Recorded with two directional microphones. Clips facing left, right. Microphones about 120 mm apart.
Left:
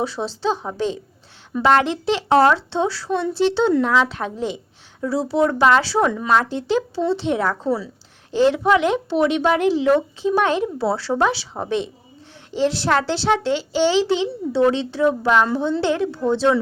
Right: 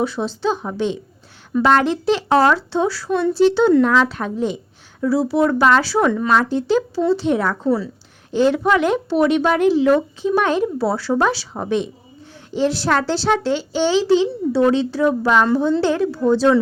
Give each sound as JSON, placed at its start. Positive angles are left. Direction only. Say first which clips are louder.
{"t": 0.0, "sound": "a woman's voice", "louder": "right 2 dB", "side_deg": 30}
{"t": 6.1, "sound": "speech", "louder": "right 2 dB", "side_deg": 15}